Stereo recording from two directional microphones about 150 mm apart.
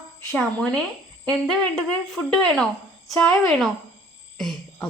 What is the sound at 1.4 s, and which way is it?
A woman's voice, 5° left (ahead or behind).